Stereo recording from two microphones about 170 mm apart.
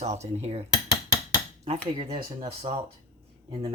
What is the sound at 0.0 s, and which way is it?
Speech, 40° right (ahead or behind).